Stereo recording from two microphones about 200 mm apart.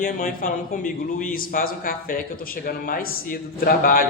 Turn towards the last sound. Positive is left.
turn(degrees=45)  # may be behind; listen again after turning